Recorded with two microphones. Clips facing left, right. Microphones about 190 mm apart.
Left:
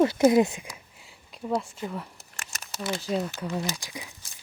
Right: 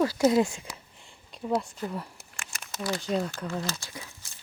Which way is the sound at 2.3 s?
40° left (ahead or behind).